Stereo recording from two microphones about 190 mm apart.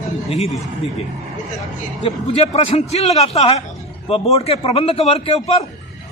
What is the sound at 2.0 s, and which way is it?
A man's voice, 30° left (ahead or behind).